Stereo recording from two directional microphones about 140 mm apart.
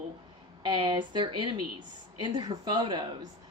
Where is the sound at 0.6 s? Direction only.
35° right (ahead or behind).